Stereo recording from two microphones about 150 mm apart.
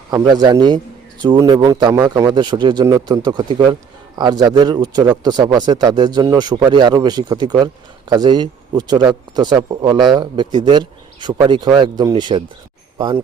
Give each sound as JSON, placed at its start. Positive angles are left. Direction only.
{"t": 0.1, "sound": "a man's voice", "side_deg": -25}